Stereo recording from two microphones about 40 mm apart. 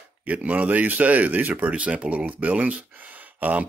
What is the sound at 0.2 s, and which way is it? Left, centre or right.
Speech, right.